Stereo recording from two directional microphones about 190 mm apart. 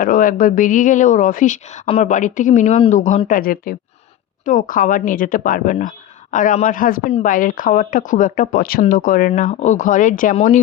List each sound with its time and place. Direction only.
0.0 s speech: 45° left (ahead or behind)